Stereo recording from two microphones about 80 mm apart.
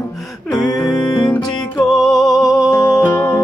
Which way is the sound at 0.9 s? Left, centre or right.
Left.